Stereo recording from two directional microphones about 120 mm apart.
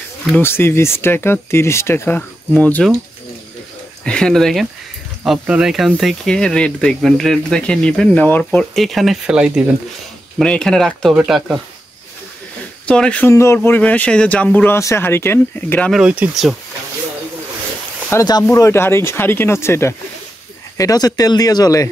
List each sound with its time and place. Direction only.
0.4 s speech: 20° left (ahead or behind)
4.0 s speech: 5° left (ahead or behind)
8.7 s speech: centre (ahead or behind)
10.4 s speech: 5° left (ahead or behind)
12.8 s speech: 10° left (ahead or behind)
13.3 s speech: 25° left (ahead or behind)
13.6 s speech: 10° left (ahead or behind)
15.9 s speech: 10° right (ahead or behind)
18.2 s speech: 30° left (ahead or behind)